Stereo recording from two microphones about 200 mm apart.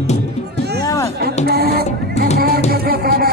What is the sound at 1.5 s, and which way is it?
Music, 50° right (ahead or behind).